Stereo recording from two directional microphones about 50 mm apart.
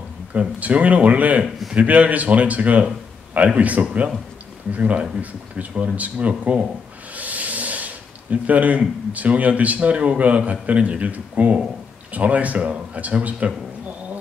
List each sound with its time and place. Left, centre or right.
0.3 s speech: right
1.4 s a man's voice: centre
1.8 s speech: right